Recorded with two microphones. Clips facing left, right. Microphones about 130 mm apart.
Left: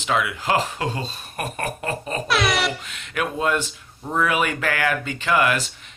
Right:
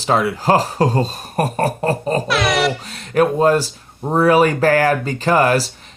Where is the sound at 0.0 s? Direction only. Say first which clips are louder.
Right 6 dB; 35° right (ahead or behind).